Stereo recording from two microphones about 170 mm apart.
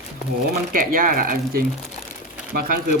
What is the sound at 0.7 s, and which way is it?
Speech, 55° right (ahead or behind).